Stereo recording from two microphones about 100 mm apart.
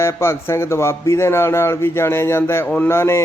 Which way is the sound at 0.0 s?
25° left (ahead or behind).